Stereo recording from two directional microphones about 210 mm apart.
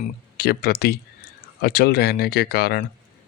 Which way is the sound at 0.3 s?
45° left (ahead or behind).